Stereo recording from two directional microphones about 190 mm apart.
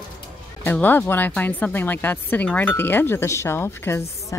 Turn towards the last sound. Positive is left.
turn(degrees=15)  # may be behind; listen again after turning